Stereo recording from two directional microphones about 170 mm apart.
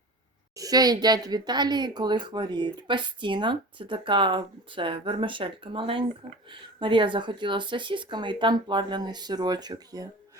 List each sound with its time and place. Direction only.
0.5 s speech: 20° right (ahead or behind)